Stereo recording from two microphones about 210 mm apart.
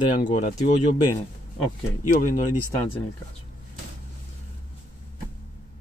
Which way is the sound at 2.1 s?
40° left (ahead or behind).